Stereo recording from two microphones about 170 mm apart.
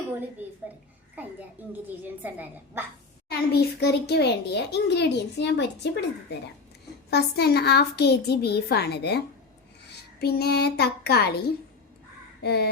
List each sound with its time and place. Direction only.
1.6 s a woman's voice: 10° right (ahead or behind)
3.2 s a child's voice: 65° left (ahead or behind); by 5.9 s 90° left
7.1 s a child's voice: 70° left (ahead or behind)